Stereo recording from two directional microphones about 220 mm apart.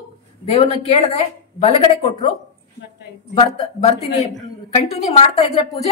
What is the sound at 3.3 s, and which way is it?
A woman's voice, 25° left (ahead or behind).